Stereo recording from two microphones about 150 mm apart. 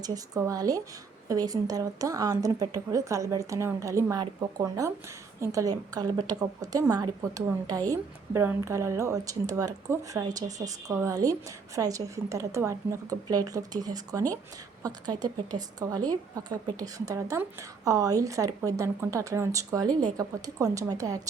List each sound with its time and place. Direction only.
0.0 s a woman's voice: 20° right (ahead or behind)